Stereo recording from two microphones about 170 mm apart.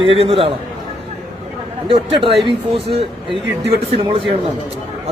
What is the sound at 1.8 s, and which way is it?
Speech, 30° right (ahead or behind).